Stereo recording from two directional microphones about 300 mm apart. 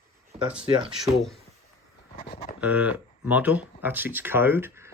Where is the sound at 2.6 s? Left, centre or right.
Centre.